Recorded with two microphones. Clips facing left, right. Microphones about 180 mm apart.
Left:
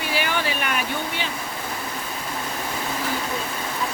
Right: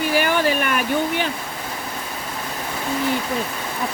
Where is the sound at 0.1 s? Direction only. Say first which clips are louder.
Right 5 dB; 45° right (ahead or behind).